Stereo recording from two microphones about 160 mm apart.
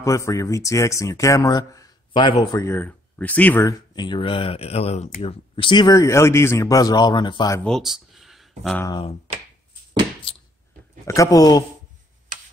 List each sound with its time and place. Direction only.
0.0 s speech: 20° left (ahead or behind)
3.9 s speech: 30° left (ahead or behind)
7.6 s a sound: centre (ahead or behind)
11.1 s speech: 20° left (ahead or behind)